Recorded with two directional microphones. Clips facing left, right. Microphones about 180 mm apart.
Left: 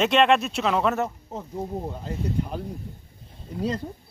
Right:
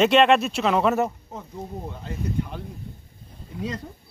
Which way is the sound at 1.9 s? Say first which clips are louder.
Left 1 dB; 40° left (ahead or behind).